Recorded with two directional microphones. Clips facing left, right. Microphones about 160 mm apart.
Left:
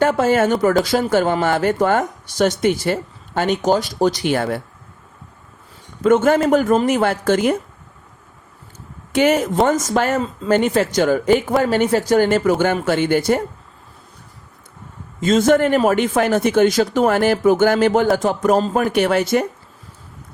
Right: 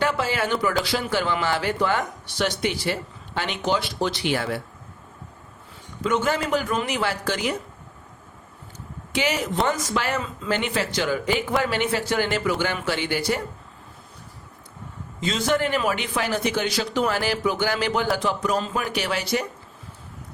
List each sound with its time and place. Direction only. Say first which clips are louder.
0.0 s speech: left 9 dB; 45° left (ahead or behind)
6.0 s speech: left 9 dB; 50° left (ahead or behind)
9.1 s speech: left 9 dB; 50° left (ahead or behind)
15.2 s speech: left 9 dB; 50° left (ahead or behind)